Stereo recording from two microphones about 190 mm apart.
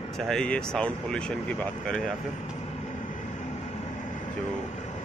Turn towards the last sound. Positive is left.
turn(degrees=40)  # may be behind; listen again after turning